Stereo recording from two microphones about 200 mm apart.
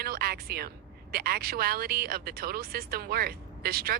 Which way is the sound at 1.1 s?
50° right (ahead or behind).